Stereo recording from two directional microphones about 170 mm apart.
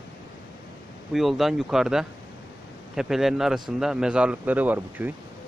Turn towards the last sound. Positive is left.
turn(degrees=-10)  # may be behind; listen again after turning